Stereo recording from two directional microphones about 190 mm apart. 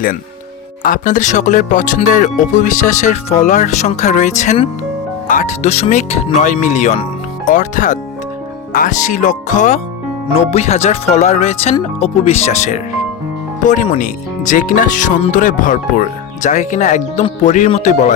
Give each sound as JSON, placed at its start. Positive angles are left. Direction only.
{"t": 0.8, "sound": "speech", "side_deg": 45}
{"t": 13.8, "sound": "speech", "side_deg": 35}